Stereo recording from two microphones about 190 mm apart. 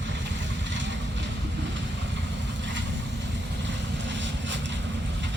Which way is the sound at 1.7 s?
70° right (ahead or behind).